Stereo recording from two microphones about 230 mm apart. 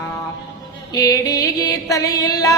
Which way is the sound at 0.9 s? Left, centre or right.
Centre.